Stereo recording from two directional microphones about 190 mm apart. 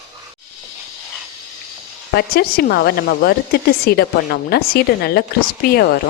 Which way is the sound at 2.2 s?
55° left (ahead or behind).